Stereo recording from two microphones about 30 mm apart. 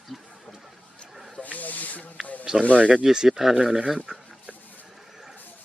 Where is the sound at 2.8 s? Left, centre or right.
Right.